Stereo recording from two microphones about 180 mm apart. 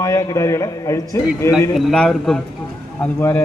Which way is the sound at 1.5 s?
Centre (ahead or behind).